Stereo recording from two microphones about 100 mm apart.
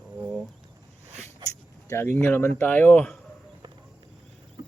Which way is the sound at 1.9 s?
25° left (ahead or behind).